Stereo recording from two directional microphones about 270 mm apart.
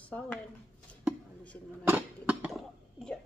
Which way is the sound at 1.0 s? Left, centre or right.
Centre.